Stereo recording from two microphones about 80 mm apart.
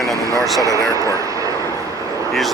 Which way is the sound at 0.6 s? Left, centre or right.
Right.